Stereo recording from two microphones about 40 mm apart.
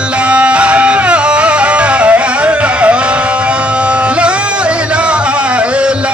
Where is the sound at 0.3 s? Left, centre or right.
Right.